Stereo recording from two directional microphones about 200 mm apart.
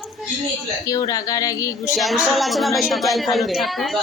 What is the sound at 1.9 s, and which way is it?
A woman's voice, centre (ahead or behind).